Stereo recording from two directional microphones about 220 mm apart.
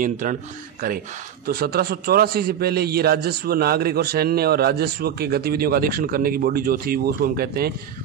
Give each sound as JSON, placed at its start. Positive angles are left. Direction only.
{"t": 0.0, "sound": "speech", "side_deg": -35}